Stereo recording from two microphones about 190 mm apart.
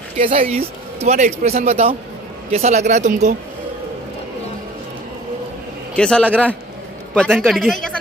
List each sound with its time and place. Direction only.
0.4 s a man's voice: 30° right (ahead or behind)
5.9 s speech: 5° left (ahead or behind)